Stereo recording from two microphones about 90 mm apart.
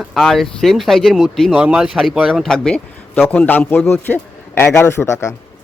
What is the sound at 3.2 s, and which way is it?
Speech, 20° left (ahead or behind).